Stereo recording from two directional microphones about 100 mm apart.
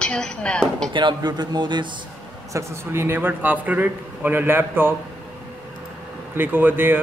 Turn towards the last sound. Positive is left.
turn(degrees=-20)  # may be behind; listen again after turning